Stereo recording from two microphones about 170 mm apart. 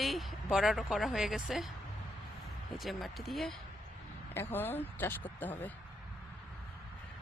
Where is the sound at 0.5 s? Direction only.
Centre (ahead or behind).